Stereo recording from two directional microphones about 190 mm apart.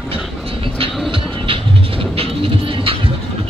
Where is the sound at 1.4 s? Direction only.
30° right (ahead or behind).